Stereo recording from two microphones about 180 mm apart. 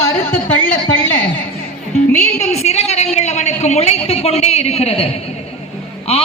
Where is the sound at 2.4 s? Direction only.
35° left (ahead or behind).